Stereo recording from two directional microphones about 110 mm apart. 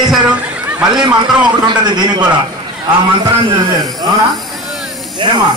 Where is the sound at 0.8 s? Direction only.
40° right (ahead or behind).